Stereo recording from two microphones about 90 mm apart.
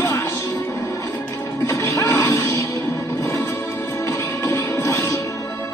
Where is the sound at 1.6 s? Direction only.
35° left (ahead or behind).